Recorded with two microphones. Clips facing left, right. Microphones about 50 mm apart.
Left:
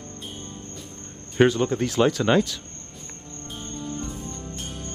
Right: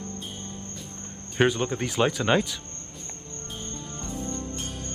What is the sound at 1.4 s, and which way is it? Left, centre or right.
Speech, centre.